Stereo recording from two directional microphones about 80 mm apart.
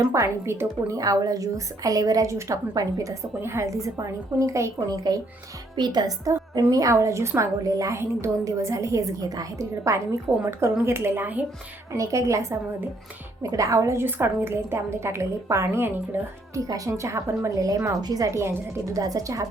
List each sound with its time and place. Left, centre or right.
0.1 s a woman's voice: right
0.9 s a woman's voice: right
5.7 s a woman's voice: right
11.9 s a woman's voice: right
14.0 s a woman's voice: right
16.6 s a woman's voice: right
18.3 s a woman's voice: right
18.9 s a woman's voice: right